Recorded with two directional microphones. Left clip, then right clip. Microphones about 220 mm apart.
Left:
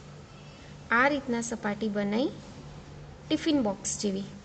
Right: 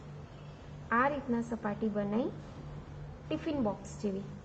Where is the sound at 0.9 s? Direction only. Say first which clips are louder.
Left 5 dB; 50° left (ahead or behind).